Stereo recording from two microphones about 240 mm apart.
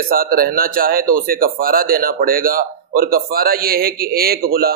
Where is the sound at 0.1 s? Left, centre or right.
Right.